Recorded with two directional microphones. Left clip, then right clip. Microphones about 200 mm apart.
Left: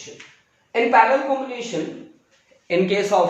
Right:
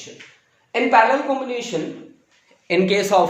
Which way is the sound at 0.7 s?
45° right (ahead or behind).